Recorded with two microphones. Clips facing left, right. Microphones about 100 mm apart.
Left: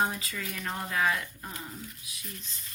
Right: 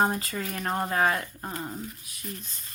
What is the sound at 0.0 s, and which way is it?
Speech, 50° right (ahead or behind).